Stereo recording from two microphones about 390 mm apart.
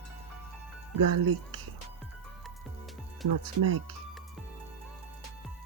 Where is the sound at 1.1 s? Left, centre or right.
Right.